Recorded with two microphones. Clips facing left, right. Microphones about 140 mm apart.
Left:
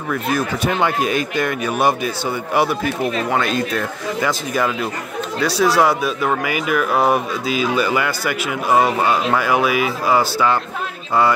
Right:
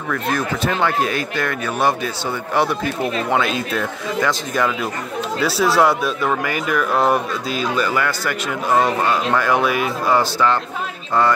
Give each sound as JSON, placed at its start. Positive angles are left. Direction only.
{"t": 0.1, "sound": "speech", "side_deg": 15}